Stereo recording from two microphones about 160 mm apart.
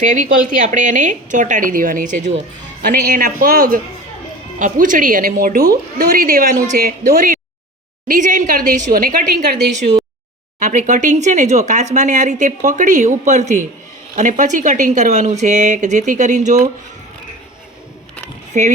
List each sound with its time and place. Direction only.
0.0 s speech: 55° right (ahead or behind)
2.8 s a woman's voice: 65° right (ahead or behind)
10.6 s speech: 50° right (ahead or behind)
18.5 s speech: 50° right (ahead or behind)